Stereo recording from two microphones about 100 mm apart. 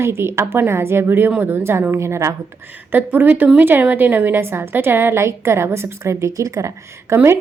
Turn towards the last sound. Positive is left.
turn(degrees=-30)  # may be behind; listen again after turning